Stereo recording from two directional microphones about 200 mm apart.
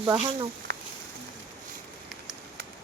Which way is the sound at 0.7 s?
50° right (ahead or behind).